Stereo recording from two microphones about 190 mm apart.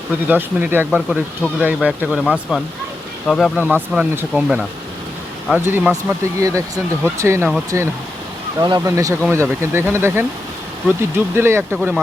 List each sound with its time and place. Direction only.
0.3 s speech: 10° right (ahead or behind)
3.6 s speech: 10° right (ahead or behind)
5.6 s speech: 10° right (ahead or behind)
11.3 s speech: 10° right (ahead or behind)